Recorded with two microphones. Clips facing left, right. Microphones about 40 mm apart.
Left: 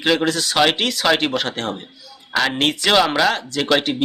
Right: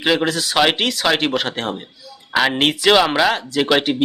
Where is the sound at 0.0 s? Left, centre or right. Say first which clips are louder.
Even; centre.